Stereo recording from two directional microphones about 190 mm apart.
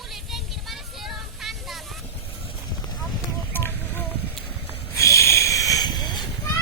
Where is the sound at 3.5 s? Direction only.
10° left (ahead or behind).